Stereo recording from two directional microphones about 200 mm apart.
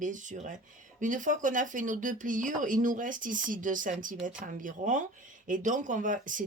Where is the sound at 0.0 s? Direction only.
40° right (ahead or behind).